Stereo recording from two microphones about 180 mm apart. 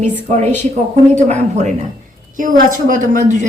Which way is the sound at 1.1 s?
40° right (ahead or behind).